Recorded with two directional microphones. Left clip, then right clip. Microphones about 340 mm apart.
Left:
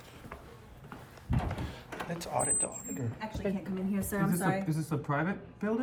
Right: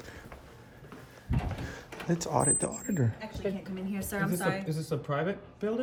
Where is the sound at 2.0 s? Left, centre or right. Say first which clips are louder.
Right 5 dB; centre.